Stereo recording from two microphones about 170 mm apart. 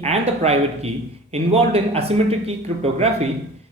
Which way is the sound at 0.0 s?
40° right (ahead or behind).